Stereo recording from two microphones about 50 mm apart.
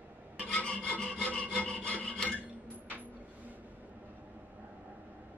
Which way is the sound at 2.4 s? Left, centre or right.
Right.